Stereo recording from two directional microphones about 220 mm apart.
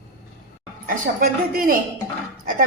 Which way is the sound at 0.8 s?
40° right (ahead or behind).